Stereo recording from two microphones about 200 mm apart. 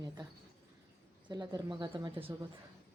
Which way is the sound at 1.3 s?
20° right (ahead or behind).